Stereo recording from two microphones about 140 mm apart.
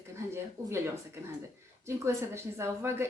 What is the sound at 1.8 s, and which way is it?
Speech, 20° right (ahead or behind).